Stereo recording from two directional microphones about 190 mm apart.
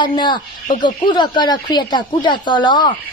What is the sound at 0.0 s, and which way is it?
Speech, 25° left (ahead or behind).